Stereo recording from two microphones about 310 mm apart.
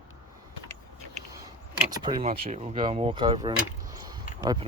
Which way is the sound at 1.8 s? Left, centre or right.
Centre.